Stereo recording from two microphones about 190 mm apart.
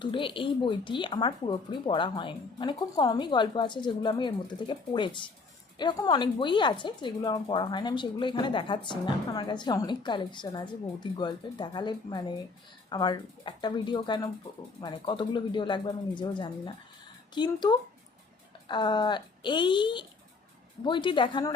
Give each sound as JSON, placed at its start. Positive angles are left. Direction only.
{"t": 0.0, "sound": "speech", "side_deg": 25}